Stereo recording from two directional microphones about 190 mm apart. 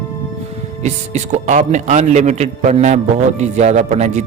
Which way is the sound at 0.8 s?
40° right (ahead or behind).